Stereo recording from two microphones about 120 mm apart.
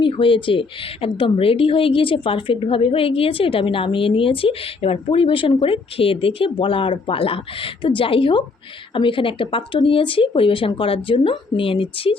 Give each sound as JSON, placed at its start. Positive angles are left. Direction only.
{"t": 0.0, "sound": "speech", "side_deg": 45}